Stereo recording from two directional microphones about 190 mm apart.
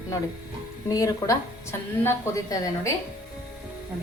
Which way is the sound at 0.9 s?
20° left (ahead or behind).